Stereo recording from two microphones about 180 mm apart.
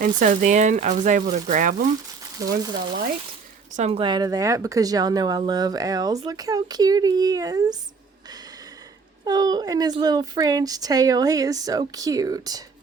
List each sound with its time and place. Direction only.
0.2 s speech: 45° right (ahead or behind)
2.6 s speech: 25° right (ahead or behind)
9.2 s speech: 20° right (ahead or behind)